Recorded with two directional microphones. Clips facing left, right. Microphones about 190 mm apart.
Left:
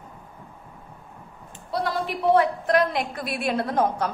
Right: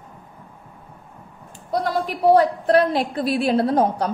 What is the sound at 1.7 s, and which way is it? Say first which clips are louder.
A woman's voice: right 4 dB; 40° right (ahead or behind).